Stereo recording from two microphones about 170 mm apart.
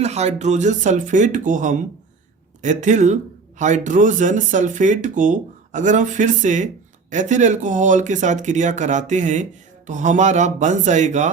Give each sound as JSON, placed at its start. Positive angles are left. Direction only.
{"t": 0.0, "sound": "speech", "side_deg": -40}